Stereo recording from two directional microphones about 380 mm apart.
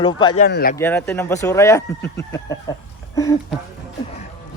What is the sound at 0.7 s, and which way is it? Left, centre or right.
Speech, centre.